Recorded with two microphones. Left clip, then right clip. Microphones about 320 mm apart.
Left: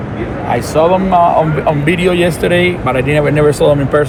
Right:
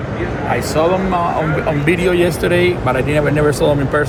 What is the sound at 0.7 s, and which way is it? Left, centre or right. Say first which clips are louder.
Speech: left 5 dB; left.